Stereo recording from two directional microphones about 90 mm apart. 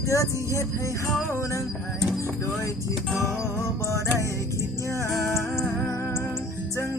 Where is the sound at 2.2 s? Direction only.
35° left (ahead or behind).